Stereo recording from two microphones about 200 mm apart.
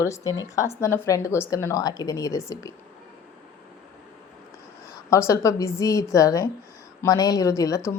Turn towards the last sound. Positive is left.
turn(degrees=15)  # may be behind; listen again after turning